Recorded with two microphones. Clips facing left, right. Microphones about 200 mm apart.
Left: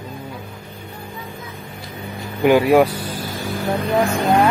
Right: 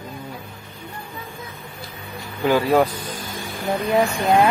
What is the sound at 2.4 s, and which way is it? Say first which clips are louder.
Speech: left 4 dB; 15° left (ahead or behind).